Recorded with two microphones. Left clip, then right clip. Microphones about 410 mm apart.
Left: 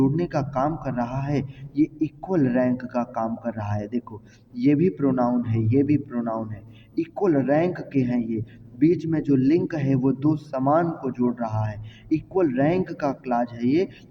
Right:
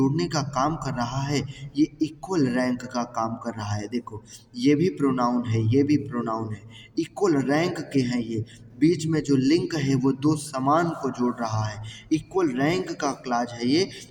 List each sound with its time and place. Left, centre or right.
0.0 s a man's voice: left